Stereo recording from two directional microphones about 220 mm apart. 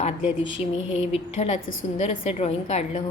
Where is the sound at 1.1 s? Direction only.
30° left (ahead or behind).